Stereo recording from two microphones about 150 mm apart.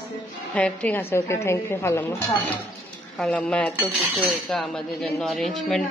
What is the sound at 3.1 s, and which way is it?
A man's voice, 5° left (ahead or behind).